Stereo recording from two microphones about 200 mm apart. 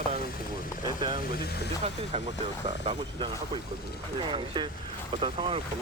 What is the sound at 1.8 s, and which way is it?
Speech, 35° right (ahead or behind).